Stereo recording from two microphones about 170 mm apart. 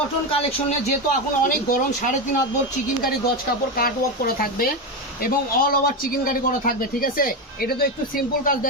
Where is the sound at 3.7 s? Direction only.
60° left (ahead or behind).